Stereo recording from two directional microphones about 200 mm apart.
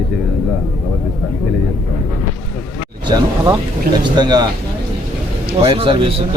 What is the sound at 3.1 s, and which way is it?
Speech, 20° right (ahead or behind).